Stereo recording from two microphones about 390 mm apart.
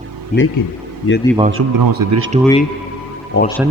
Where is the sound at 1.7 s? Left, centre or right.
Right.